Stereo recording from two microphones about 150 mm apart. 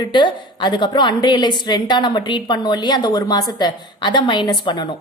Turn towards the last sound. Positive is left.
turn(degrees=30)  # may be behind; listen again after turning